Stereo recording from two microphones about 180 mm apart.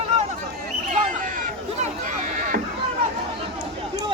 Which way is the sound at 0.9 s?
45° right (ahead or behind).